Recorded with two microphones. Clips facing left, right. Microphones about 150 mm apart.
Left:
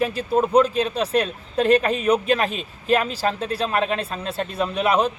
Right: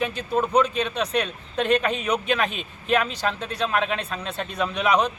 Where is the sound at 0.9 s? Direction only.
35° left (ahead or behind).